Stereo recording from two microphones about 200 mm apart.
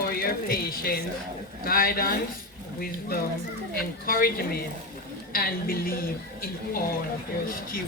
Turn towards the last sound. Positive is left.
turn(degrees=45)  # may be behind; listen again after turning